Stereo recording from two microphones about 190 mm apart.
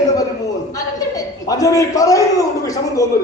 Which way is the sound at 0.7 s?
20° left (ahead or behind).